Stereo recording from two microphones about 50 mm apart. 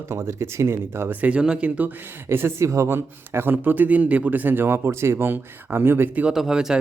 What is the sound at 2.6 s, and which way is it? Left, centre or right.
A man's voice, right.